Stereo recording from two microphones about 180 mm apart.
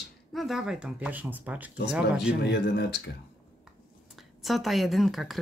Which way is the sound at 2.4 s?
65° left (ahead or behind).